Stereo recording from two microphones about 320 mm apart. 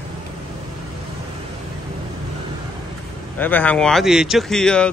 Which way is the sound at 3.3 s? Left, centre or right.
Centre.